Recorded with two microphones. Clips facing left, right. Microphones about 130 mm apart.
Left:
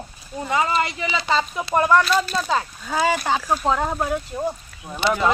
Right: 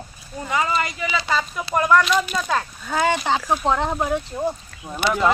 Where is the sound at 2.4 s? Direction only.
5° left (ahead or behind).